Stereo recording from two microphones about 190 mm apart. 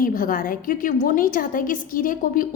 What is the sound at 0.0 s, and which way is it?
A woman's voice, 45° left (ahead or behind).